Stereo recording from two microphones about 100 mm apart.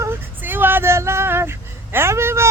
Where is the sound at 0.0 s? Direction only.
20° right (ahead or behind).